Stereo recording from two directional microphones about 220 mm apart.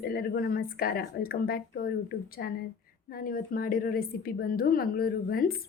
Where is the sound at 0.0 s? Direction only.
40° left (ahead or behind).